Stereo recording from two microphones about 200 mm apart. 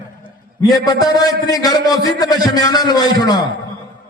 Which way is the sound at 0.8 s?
20° left (ahead or behind).